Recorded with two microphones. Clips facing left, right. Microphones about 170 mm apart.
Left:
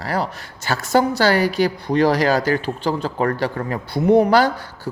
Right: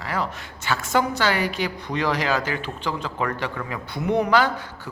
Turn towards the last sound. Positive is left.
turn(degrees=35)  # may be behind; listen again after turning